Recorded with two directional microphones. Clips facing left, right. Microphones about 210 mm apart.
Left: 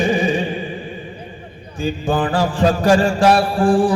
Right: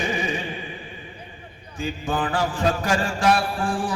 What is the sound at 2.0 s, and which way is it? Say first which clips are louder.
Mantra: left 6 dB; 35° left (ahead or behind).